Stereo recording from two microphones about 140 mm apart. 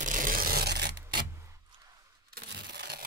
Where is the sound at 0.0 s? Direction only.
70° right (ahead or behind); by 0.7 s 90° right.